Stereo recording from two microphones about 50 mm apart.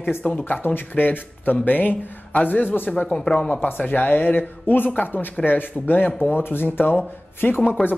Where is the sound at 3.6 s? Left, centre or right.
Left.